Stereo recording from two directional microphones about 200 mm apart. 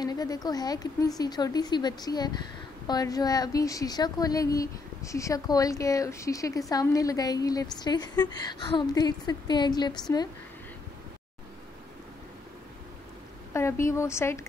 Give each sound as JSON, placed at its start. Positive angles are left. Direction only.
{"t": 0.0, "sound": "a woman's voice", "side_deg": 20}
{"t": 13.5, "sound": "speech", "side_deg": 15}